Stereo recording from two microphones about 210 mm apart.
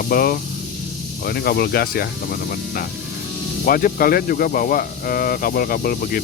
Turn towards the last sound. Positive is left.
turn(degrees=45)  # may be behind; listen again after turning